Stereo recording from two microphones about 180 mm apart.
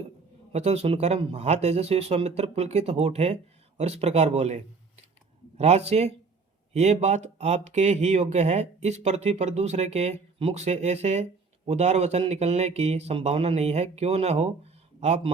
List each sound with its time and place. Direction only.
0.5 s speech: 35° right (ahead or behind)